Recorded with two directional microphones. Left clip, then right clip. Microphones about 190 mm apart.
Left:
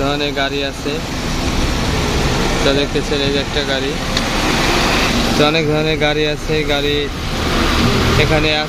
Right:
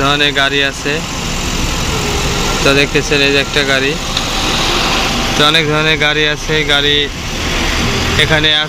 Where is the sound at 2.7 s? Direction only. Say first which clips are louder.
Right 8 dB; 10° right (ahead or behind).